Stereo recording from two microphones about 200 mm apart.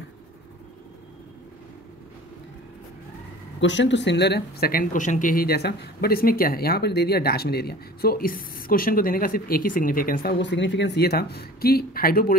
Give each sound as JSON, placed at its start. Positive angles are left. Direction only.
{"t": 3.6, "sound": "speech", "side_deg": 65}